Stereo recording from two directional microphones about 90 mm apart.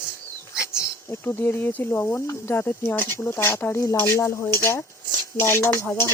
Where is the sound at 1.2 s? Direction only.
25° left (ahead or behind).